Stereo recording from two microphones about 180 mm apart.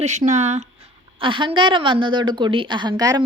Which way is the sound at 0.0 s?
40° right (ahead or behind).